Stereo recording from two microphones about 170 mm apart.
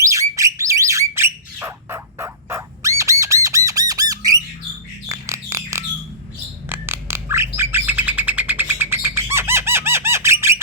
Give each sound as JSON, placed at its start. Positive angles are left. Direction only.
{"t": 0.0, "sound": "bird", "side_deg": -20}